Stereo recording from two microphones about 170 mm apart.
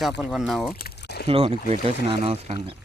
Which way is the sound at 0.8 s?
70° left (ahead or behind).